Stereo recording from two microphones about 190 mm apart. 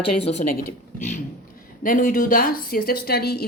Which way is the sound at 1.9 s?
45° left (ahead or behind).